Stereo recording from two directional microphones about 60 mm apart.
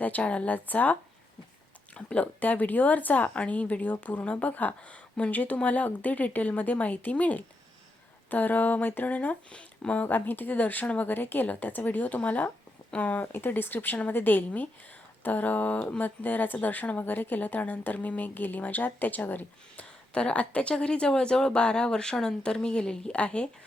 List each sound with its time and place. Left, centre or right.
0.0 s speech: left
20.1 s speech: centre